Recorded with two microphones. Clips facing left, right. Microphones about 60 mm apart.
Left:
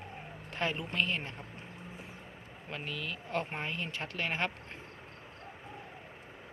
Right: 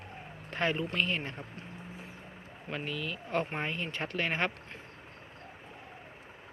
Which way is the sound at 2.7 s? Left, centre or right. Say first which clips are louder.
Right 3 dB; centre.